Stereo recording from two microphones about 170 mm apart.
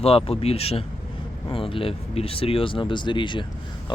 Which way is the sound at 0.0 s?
35° left (ahead or behind).